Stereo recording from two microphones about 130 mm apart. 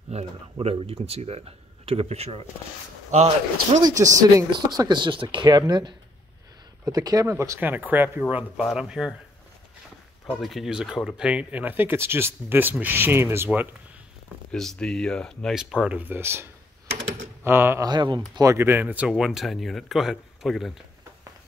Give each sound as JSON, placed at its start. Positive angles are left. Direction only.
{"t": 0.1, "sound": "speech", "side_deg": -55}
{"t": 3.8, "sound": "speech", "side_deg": -25}
{"t": 10.4, "sound": "speech", "side_deg": 0}
{"t": 14.5, "sound": "speech", "side_deg": 5}
{"t": 15.5, "sound": "speech", "side_deg": -5}
{"t": 17.8, "sound": "speech", "side_deg": -35}
{"t": 18.4, "sound": "speech", "side_deg": -20}